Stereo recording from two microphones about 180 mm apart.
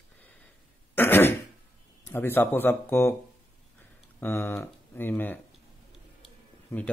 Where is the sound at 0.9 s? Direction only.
10° left (ahead or behind).